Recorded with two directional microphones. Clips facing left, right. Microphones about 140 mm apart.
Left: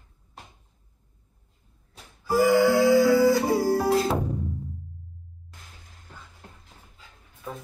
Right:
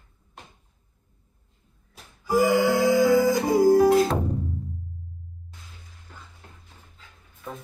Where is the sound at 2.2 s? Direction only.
15° right (ahead or behind).